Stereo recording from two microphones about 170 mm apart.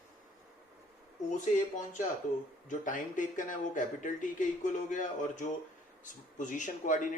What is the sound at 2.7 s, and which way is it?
Speech, 50° left (ahead or behind).